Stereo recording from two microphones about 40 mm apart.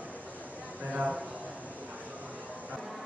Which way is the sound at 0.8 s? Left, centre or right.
Right.